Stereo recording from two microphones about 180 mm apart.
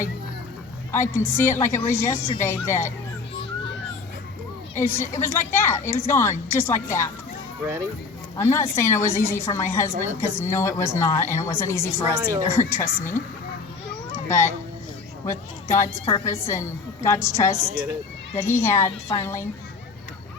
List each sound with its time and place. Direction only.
0.9 s a woman's voice: 15° left (ahead or behind)
4.8 s a woman's voice: 15° left (ahead or behind)
7.6 s speech: 15° right (ahead or behind)
8.4 s a woman's voice: 15° left (ahead or behind)
12.1 s a woman's voice: 20° right (ahead or behind)
12.5 s a woman's voice: 15° left (ahead or behind)
14.1 s a sound: 15° left (ahead or behind)
16.0 s a woman's voice: 15° left (ahead or behind)